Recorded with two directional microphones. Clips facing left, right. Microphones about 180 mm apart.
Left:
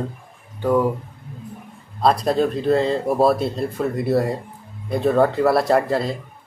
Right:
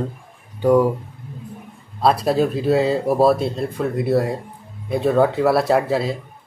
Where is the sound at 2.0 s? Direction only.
5° right (ahead or behind).